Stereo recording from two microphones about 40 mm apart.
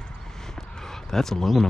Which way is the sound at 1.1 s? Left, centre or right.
Centre.